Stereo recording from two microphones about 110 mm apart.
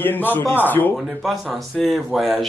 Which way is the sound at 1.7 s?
Centre (ahead or behind).